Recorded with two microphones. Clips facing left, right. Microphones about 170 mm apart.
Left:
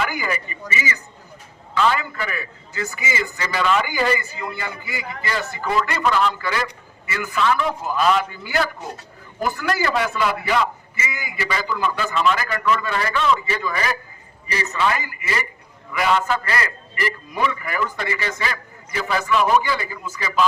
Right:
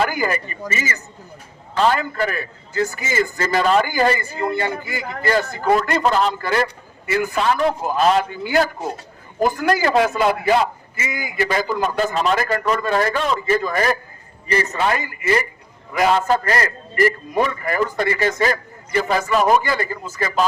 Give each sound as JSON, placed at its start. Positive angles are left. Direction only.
{"t": 0.0, "sound": "a man's voice", "side_deg": -40}